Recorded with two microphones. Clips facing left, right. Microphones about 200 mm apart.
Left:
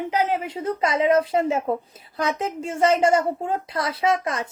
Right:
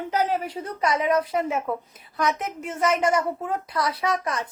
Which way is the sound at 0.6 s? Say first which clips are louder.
Left 4 dB; 25° left (ahead or behind).